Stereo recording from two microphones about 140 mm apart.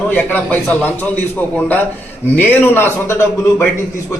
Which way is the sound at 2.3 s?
15° left (ahead or behind).